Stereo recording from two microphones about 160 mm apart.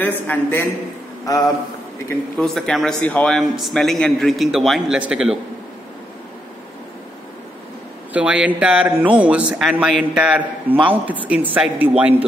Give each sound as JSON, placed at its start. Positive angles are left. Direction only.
{"t": 0.0, "sound": "a man's voice", "side_deg": 10}
{"t": 2.3, "sound": "a man's voice", "side_deg": 5}
{"t": 8.1, "sound": "speech", "side_deg": -5}